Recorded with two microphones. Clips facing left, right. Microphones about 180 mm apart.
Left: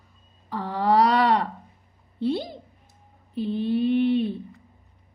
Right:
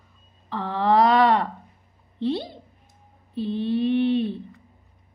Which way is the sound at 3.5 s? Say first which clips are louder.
Even; 10° left (ahead or behind).